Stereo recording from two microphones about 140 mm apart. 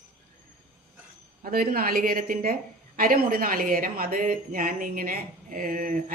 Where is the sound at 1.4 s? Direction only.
90° right.